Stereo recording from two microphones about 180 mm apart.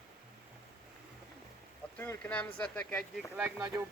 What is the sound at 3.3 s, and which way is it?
Speech, 10° right (ahead or behind).